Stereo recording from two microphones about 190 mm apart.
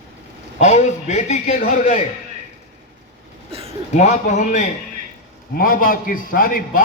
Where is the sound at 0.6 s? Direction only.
40° left (ahead or behind).